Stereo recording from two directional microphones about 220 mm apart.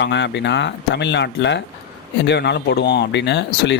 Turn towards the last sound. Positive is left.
turn(degrees=50)  # may be behind; listen again after turning